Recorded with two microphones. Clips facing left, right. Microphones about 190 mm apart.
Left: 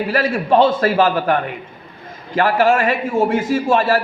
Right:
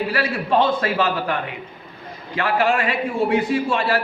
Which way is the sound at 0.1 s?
45° left (ahead or behind).